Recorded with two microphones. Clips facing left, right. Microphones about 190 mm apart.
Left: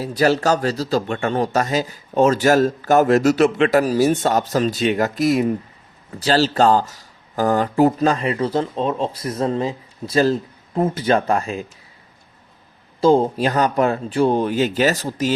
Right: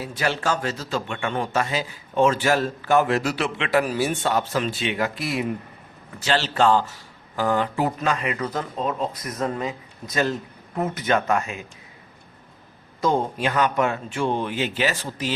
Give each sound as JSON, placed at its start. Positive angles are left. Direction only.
{"t": 0.0, "sound": "speech", "side_deg": 40}
{"t": 13.0, "sound": "speech", "side_deg": 30}